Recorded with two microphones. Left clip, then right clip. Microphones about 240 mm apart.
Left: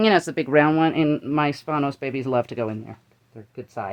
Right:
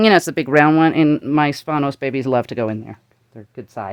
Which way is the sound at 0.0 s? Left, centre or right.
Right.